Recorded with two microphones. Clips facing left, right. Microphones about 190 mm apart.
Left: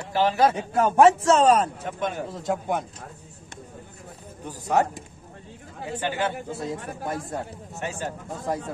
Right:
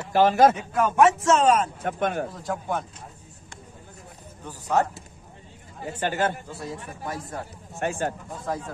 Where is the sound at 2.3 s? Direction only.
20° left (ahead or behind).